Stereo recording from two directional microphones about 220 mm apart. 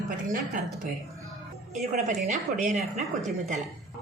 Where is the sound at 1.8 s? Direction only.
35° right (ahead or behind).